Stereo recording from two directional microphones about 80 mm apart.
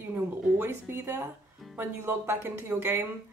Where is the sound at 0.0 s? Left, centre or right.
Right.